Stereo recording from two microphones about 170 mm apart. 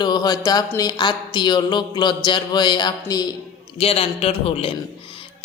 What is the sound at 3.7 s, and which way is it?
A man's voice, 35° left (ahead or behind).